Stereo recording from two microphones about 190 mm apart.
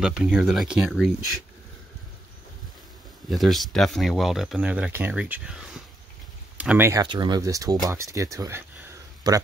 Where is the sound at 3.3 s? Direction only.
Centre (ahead or behind).